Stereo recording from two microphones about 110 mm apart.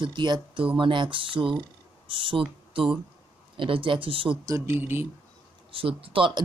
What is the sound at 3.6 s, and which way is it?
Speech, 50° right (ahead or behind).